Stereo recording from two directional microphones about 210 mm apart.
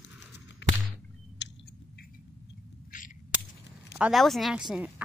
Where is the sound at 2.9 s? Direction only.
40° left (ahead or behind).